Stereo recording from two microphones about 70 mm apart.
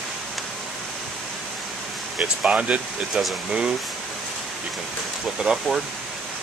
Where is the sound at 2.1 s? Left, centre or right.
Centre.